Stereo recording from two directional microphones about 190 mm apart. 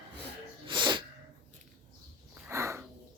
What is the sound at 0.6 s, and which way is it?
Sneeze, 25° right (ahead or behind).